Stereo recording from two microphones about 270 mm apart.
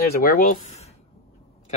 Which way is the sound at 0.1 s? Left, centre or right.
Left.